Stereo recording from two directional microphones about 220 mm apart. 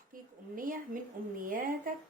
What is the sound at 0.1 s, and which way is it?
A woman's voice, 40° right (ahead or behind).